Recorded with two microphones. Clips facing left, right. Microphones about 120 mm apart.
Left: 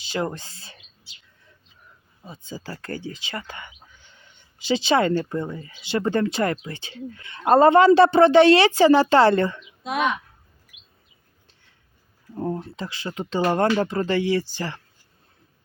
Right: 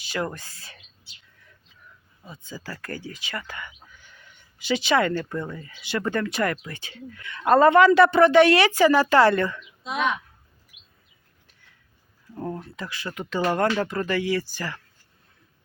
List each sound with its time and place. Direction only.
0.0 s speech: 25° left (ahead or behind)
2.2 s speech: 30° left (ahead or behind)
9.8 s speech: 50° left (ahead or behind)
10.7 s chirp: 90° left
11.4 s a sound: 30° left (ahead or behind)
12.3 s speech: 25° left (ahead or behind)